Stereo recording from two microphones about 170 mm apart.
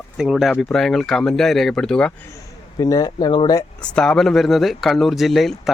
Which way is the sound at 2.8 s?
20° left (ahead or behind).